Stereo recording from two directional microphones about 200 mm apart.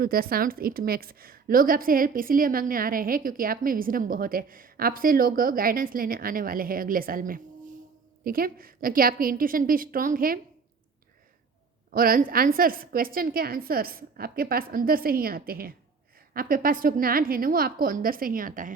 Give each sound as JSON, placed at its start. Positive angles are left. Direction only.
{"t": 0.0, "sound": "a woman's voice", "side_deg": -50}
{"t": 11.9, "sound": "a woman's voice", "side_deg": -45}